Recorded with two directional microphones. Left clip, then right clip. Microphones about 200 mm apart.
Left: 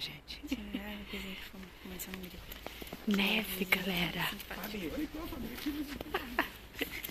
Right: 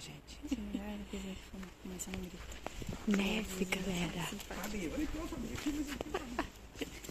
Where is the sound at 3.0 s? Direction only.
Centre (ahead or behind).